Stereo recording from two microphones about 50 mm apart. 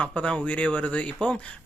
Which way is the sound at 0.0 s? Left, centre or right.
Left.